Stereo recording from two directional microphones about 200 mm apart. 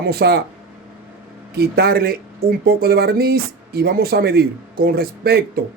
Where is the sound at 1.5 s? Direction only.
50° right (ahead or behind).